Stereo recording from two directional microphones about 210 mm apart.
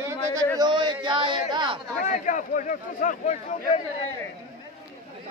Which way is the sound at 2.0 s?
35° left (ahead or behind).